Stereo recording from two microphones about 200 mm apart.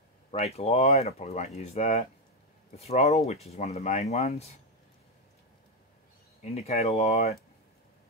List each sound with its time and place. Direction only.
0.3 s speech: 30° left (ahead or behind)
6.4 s speech: 30° left (ahead or behind)